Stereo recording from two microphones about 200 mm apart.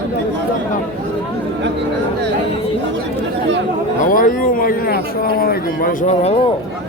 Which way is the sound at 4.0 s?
45° left (ahead or behind).